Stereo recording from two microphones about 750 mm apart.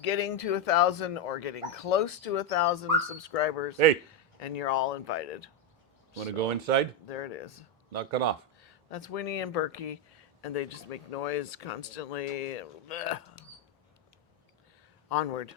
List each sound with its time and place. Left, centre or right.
0.0 s speech: left
6.1 s speech: right
7.1 s speech: left
7.9 s speech: right
8.6 s speech: left
15.1 s speech: left